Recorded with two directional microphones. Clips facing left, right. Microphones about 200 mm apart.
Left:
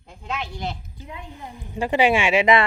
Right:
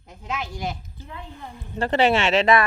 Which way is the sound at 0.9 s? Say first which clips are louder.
Left 1 dB; 15° left (ahead or behind).